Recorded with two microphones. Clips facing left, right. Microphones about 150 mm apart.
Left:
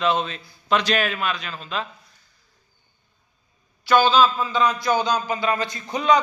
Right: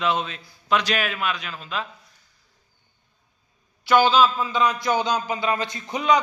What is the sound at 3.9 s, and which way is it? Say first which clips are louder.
A man's voice: even; 15° right (ahead or behind).